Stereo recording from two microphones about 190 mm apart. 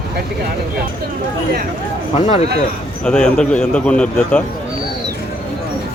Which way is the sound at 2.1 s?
35° left (ahead or behind).